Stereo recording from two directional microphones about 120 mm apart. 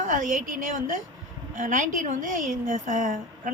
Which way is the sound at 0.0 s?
90° right.